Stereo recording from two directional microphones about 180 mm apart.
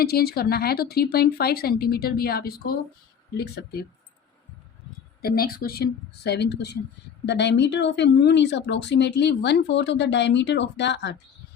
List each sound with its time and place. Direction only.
0.0 s speech: 60° left (ahead or behind)
5.2 s speech: 55° left (ahead or behind); by 11.2 s 70° left (ahead or behind)